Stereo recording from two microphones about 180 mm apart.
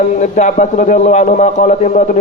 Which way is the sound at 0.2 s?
45° left (ahead or behind).